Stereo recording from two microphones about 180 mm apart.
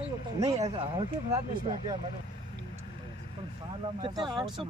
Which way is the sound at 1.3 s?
20° right (ahead or behind).